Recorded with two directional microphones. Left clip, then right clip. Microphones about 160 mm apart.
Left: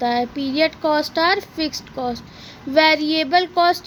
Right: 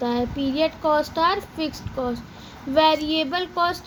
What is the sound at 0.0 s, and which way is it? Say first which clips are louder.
A child's voice: left 4 dB; 60° left (ahead or behind).